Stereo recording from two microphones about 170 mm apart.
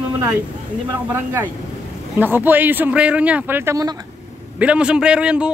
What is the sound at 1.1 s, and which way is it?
Speech, 10° right (ahead or behind).